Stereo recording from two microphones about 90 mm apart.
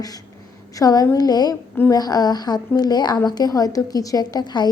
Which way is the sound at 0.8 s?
45° left (ahead or behind).